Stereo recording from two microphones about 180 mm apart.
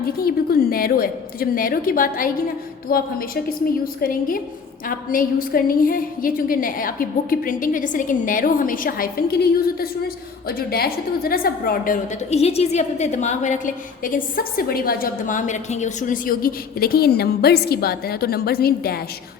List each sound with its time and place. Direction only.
0.0 s a woman's voice: 55° left (ahead or behind)
12.3 s a woman's voice: 35° left (ahead or behind); by 18.9 s 60° left (ahead or behind)